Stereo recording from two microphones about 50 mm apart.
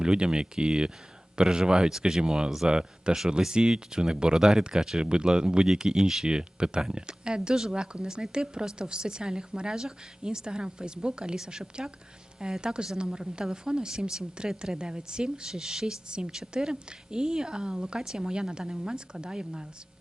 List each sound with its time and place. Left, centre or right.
0.0 s a woman's voice: centre